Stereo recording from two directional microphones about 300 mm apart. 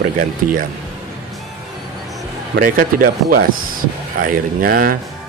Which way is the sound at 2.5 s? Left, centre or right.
Right.